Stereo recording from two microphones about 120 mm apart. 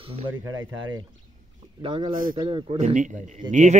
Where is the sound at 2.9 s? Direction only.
90° right.